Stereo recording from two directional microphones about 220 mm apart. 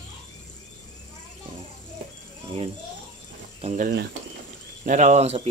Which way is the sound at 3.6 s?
30° right (ahead or behind).